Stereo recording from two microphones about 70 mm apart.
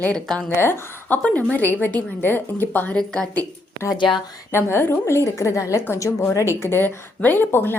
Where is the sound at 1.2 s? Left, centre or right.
Left.